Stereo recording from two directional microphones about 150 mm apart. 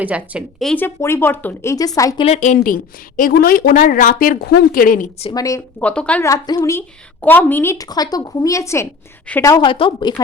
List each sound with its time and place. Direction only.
0.0 s a woman's voice: 10° right (ahead or behind)
0.6 s speech: 5° left (ahead or behind)
0.9 s speech: 15° left (ahead or behind)
2.0 s a woman's voice: 25° left (ahead or behind)
2.2 s a woman's voice: 50° left (ahead or behind)
3.2 s speech: 70° left (ahead or behind)
5.3 s a woman's voice: 20° left (ahead or behind)
5.8 s speech: 10° left (ahead or behind)
6.2 s a woman's voice: 25° left (ahead or behind)